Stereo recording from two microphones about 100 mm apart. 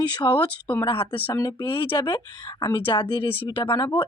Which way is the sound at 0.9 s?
60° left (ahead or behind).